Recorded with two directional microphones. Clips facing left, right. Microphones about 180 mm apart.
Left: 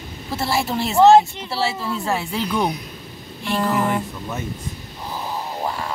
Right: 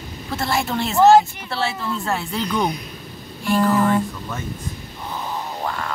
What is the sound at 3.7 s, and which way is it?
Speech, 25° left (ahead or behind).